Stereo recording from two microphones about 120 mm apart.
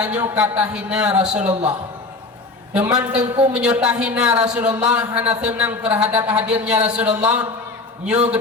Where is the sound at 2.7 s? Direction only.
10° right (ahead or behind).